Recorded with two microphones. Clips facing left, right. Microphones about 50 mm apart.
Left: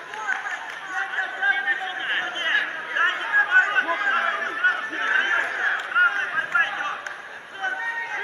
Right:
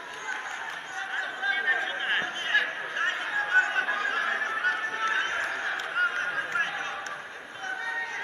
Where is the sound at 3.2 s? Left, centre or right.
Left.